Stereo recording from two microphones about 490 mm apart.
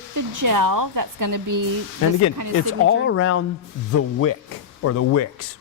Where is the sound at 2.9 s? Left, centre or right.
Left.